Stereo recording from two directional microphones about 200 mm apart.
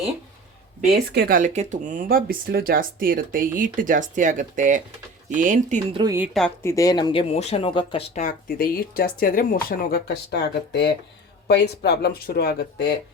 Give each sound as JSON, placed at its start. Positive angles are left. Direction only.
{"t": 0.9, "sound": "speech", "side_deg": -55}
{"t": 1.4, "sound": "speech", "side_deg": -35}
{"t": 5.8, "sound": "speech", "side_deg": -20}
{"t": 6.3, "sound": "speech", "side_deg": 10}
{"t": 8.1, "sound": "speech", "side_deg": 40}